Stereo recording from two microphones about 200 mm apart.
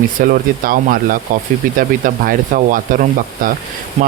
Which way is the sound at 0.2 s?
45° right (ahead or behind).